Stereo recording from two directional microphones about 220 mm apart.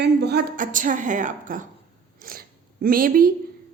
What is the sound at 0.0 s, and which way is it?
A woman's voice, 50° right (ahead or behind).